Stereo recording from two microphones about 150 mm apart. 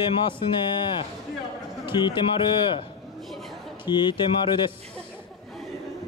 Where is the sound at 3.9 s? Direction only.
30° left (ahead or behind).